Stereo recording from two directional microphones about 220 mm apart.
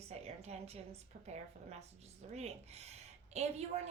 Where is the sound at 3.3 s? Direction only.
30° right (ahead or behind).